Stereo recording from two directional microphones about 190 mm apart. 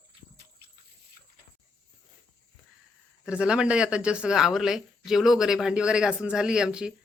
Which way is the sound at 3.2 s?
5° right (ahead or behind).